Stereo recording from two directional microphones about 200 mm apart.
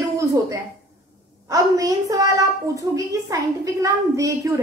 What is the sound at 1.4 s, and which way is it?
A woman's voice, 15° right (ahead or behind).